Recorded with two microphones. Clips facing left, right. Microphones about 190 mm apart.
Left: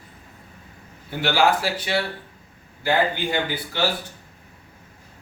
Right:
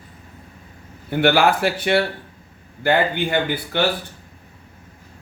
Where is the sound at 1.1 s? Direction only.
60° right (ahead or behind).